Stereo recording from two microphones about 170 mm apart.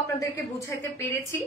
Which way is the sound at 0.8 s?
15° left (ahead or behind).